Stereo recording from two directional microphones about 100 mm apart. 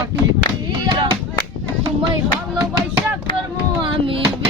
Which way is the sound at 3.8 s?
60° right (ahead or behind).